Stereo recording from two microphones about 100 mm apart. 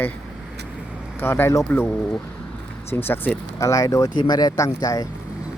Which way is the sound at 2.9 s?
20° left (ahead or behind).